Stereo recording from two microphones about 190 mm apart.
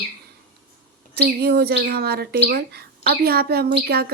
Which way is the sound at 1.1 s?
60° right (ahead or behind).